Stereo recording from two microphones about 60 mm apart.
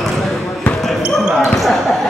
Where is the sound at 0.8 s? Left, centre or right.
Centre.